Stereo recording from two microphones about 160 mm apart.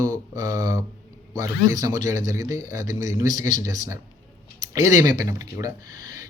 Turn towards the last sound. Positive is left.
turn(degrees=-20)  # may be behind; listen again after turning